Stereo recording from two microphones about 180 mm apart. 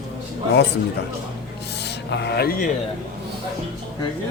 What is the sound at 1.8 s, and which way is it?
Speech, 70° left (ahead or behind).